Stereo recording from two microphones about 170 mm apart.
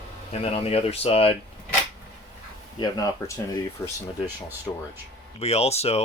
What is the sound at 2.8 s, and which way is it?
Speech, 20° left (ahead or behind).